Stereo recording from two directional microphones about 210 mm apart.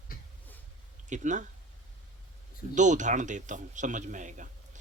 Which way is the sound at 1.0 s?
35° right (ahead or behind).